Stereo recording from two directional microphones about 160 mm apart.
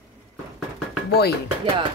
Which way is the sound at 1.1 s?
90° left.